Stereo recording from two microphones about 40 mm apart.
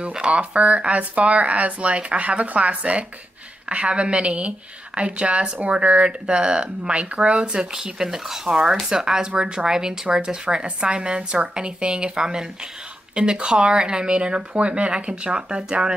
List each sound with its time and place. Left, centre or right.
0.0 s a woman's voice: right
7.7 s a woman's voice: centre